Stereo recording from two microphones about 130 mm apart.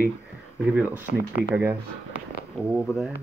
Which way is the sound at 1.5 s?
15° right (ahead or behind).